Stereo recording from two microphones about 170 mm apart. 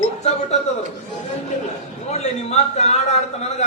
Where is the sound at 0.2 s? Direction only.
40° left (ahead or behind).